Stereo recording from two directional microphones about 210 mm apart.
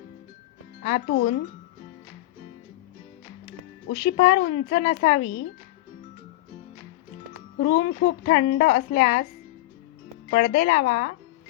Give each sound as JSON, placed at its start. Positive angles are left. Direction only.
{"t": 0.8, "sound": "a woman's voice", "side_deg": 45}
{"t": 3.8, "sound": "speech", "side_deg": 45}
{"t": 7.6, "sound": "a woman's voice", "side_deg": 50}
{"t": 10.2, "sound": "speech", "side_deg": 40}